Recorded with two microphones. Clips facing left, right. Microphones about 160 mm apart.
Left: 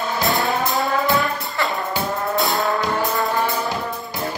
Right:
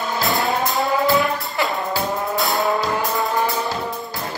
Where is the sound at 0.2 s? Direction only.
Centre (ahead or behind).